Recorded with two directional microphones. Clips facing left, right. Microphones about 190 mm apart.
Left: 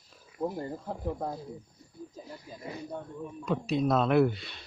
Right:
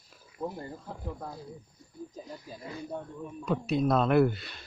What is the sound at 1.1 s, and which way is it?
Speech, 40° left (ahead or behind).